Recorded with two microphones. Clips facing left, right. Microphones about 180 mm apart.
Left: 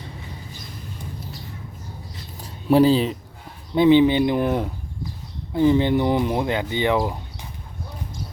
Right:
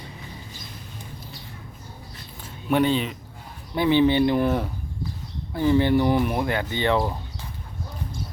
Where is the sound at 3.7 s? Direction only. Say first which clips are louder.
Left 4 dB; 20° left (ahead or behind).